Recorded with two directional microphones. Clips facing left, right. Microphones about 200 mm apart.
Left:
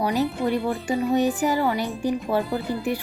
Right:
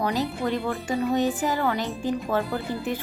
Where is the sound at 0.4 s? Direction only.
15° left (ahead or behind).